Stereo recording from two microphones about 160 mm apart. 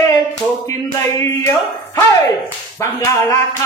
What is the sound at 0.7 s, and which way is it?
Speech, 20° left (ahead or behind).